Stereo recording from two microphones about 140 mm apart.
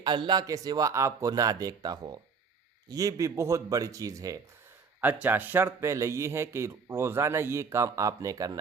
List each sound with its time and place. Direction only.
0.0 s speech: 30° right (ahead or behind)
4.9 s speech: 15° right (ahead or behind)